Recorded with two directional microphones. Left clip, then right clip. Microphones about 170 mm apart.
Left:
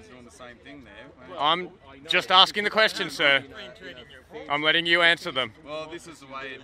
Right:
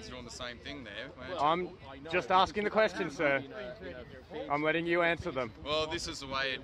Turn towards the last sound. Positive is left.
turn(degrees=-20)  # may be behind; listen again after turning